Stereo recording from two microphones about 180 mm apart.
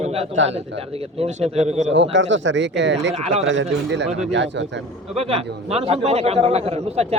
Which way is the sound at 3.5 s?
80° right.